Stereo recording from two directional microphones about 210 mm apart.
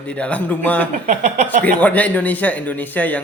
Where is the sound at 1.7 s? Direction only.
5° left (ahead or behind).